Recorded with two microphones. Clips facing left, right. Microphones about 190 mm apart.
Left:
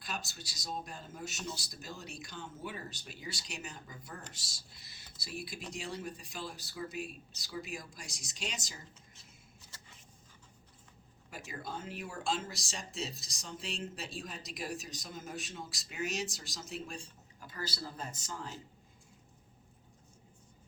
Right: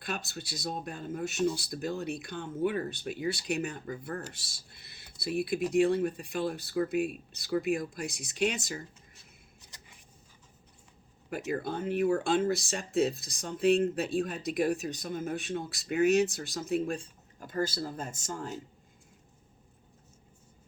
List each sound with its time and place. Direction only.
0.0 s speech: 55° right (ahead or behind)
9.7 s a sound: 15° right (ahead or behind)
11.3 s speech: 60° right (ahead or behind)